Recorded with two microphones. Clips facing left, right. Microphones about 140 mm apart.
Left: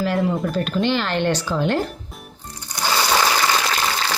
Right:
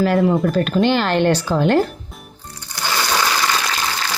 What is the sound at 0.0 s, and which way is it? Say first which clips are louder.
Speech: right 5 dB; 55° right (ahead or behind).